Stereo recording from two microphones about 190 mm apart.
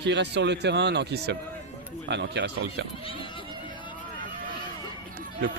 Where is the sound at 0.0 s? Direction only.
65° right (ahead or behind).